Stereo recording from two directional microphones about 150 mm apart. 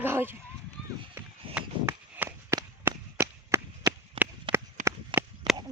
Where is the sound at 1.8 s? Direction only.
20° right (ahead or behind).